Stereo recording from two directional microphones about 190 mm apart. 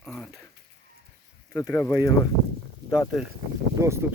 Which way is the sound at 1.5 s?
15° left (ahead or behind).